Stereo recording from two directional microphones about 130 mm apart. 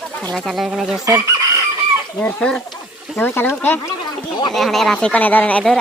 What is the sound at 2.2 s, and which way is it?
Speech, 10° left (ahead or behind).